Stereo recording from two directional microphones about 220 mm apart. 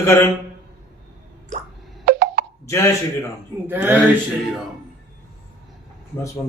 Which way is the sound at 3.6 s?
10° right (ahead or behind).